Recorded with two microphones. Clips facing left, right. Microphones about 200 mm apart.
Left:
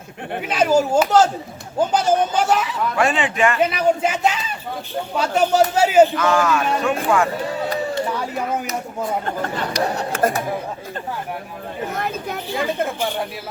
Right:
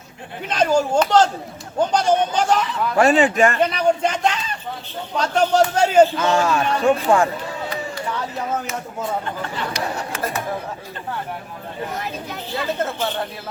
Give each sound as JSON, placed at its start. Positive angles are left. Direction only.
{"t": 0.4, "sound": "a man's voice", "side_deg": 5}
{"t": 3.0, "sound": "speech", "side_deg": -40}
{"t": 3.6, "sound": "a man's voice", "side_deg": 5}
{"t": 6.1, "sound": "speech", "side_deg": -25}
{"t": 9.2, "sound": "speech", "side_deg": 45}
{"t": 11.9, "sound": "speech", "side_deg": 50}
{"t": 12.8, "sound": "a man's voice", "side_deg": 10}